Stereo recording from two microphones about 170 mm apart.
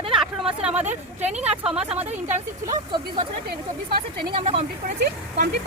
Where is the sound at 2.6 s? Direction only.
30° right (ahead or behind).